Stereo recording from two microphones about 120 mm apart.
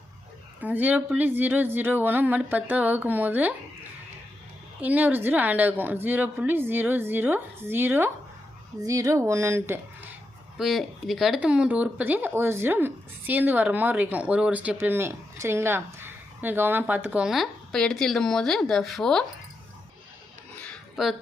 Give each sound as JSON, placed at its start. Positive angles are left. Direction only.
{"t": 0.6, "sound": "speech", "side_deg": -15}
{"t": 4.8, "sound": "speech", "side_deg": -10}
{"t": 8.8, "sound": "speech", "side_deg": -30}
{"t": 10.6, "sound": "speech", "side_deg": 0}
{"t": 20.9, "sound": "speech", "side_deg": -5}